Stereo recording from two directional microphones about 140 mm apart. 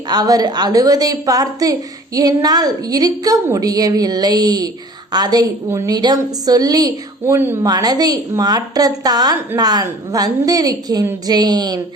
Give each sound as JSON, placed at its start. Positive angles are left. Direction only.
{"t": 0.1, "sound": "a woman's voice", "side_deg": -30}